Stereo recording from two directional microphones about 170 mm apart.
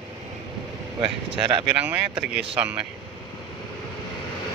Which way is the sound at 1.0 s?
30° right (ahead or behind).